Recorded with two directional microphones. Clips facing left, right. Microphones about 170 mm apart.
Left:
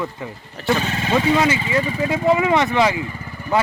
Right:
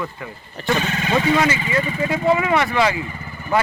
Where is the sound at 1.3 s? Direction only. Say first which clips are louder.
Left 1 dB; 20° left (ahead or behind).